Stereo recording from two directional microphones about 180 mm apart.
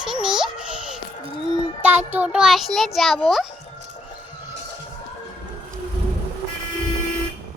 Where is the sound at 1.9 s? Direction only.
40° right (ahead or behind).